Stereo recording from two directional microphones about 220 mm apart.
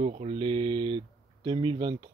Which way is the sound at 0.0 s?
30° right (ahead or behind).